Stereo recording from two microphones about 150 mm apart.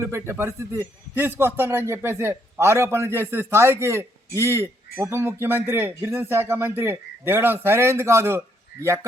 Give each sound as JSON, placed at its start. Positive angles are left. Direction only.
{"t": 0.0, "sound": "a man's voice", "side_deg": -15}